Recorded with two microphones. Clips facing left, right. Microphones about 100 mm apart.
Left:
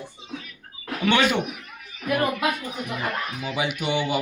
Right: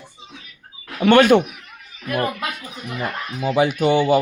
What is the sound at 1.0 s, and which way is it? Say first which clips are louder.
Speech: right 9 dB; 50° right (ahead or behind).